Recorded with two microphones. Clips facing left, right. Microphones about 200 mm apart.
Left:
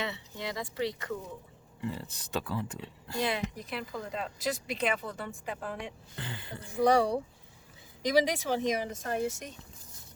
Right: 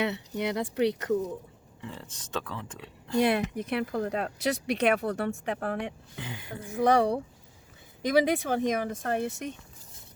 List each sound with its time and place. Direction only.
0.0 s speech: 65° right (ahead or behind)
1.8 s speech: 5° left (ahead or behind)
2.7 s speech: 60° right (ahead or behind)
6.1 s a sound: 10° right (ahead or behind)
6.8 s speech: 55° right (ahead or behind)